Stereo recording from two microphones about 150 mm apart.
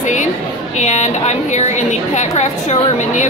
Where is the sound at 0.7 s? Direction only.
50° left (ahead or behind).